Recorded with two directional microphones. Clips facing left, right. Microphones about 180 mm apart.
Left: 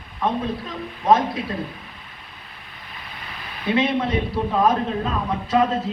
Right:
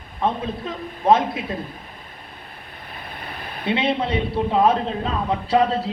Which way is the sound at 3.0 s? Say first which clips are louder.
Right 4 dB; 50° right (ahead or behind).